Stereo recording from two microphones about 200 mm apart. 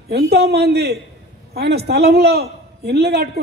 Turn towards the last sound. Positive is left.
turn(degrees=-55)  # may be behind; listen again after turning